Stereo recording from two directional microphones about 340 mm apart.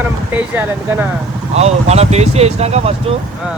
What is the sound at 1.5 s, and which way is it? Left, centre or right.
Speech, centre.